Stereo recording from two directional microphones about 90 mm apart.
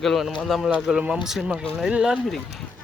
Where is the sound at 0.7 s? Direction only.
10° right (ahead or behind).